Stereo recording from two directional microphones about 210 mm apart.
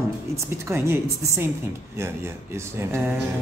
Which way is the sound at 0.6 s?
10° right (ahead or behind).